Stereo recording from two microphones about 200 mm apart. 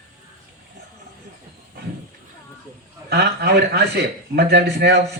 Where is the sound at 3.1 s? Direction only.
55° right (ahead or behind).